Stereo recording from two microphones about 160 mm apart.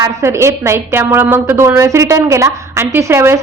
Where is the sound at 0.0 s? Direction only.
15° right (ahead or behind).